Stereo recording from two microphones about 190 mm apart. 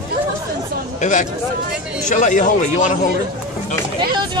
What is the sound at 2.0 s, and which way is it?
Music, 40° left (ahead or behind).